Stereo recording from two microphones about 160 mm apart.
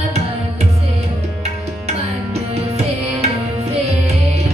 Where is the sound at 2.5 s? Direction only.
40° right (ahead or behind).